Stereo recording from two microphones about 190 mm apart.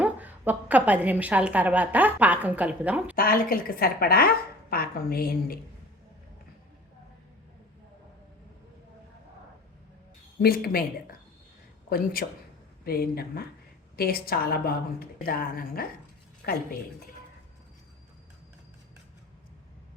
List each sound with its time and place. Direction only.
0.0 s a woman's voice: 10° right (ahead or behind)
3.2 s a woman's voice: 50° left (ahead or behind)
10.4 s a woman's voice: 55° left (ahead or behind)
11.9 s a woman's voice: 50° left (ahead or behind)